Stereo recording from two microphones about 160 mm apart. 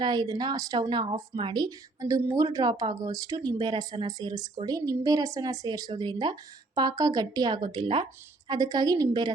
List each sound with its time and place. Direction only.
0.0 s speech: 25° right (ahead or behind)